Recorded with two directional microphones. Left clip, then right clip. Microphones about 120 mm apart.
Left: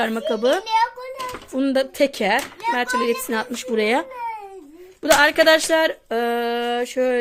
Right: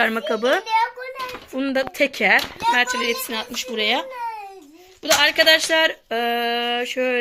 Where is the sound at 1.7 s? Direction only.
50° left (ahead or behind).